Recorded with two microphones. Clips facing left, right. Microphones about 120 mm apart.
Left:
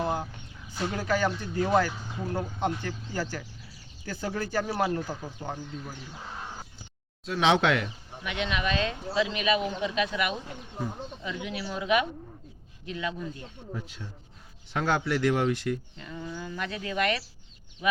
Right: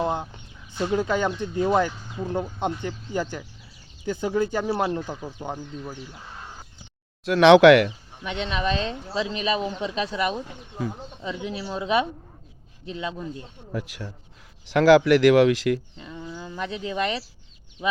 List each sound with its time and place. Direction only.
0.0 s a sound: 20° right (ahead or behind)
1.4 s speech: 20° right (ahead or behind)
7.3 s speech: 75° right (ahead or behind)
8.2 s a woman's voice: 30° right (ahead or behind)
13.7 s speech: 80° right
14.7 s speech: 90° right
16.0 s speech: 15° right (ahead or behind)